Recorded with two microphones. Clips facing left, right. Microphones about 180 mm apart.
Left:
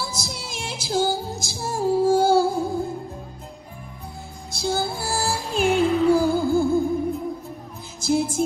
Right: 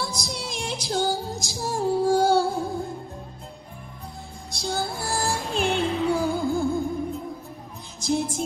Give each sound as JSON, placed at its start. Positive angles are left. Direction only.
{"t": 0.0, "sound": "music", "side_deg": 5}
{"t": 4.5, "sound": "music", "side_deg": 5}
{"t": 8.0, "sound": "music", "side_deg": 5}